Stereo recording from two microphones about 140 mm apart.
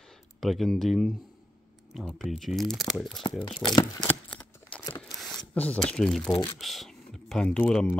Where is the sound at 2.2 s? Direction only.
Centre (ahead or behind).